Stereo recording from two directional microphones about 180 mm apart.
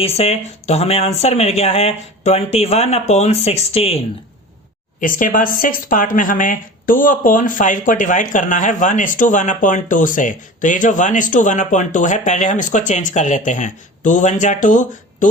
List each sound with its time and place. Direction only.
0.0 s speech: 35° left (ahead or behind)
4.9 s speech: 50° left (ahead or behind)